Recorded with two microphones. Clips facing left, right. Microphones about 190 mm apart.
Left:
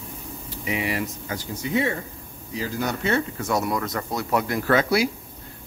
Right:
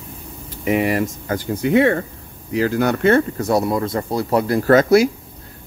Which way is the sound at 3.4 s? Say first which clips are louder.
Right 6 dB; 35° right (ahead or behind).